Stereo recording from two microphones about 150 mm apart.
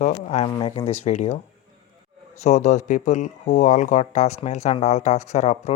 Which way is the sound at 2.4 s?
50° left (ahead or behind).